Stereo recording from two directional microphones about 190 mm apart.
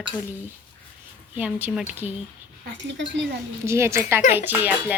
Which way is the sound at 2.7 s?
70° right (ahead or behind).